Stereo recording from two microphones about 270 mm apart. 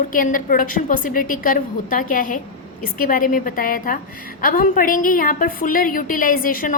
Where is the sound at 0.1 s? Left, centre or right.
Left.